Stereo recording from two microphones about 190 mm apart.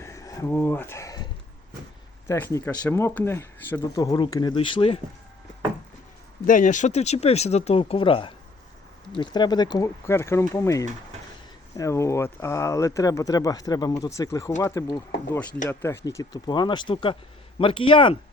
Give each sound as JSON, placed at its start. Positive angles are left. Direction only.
{"t": 0.0, "sound": "a sound", "side_deg": 15}
{"t": 2.2, "sound": "speech", "side_deg": 15}
{"t": 6.4, "sound": "speech", "side_deg": 45}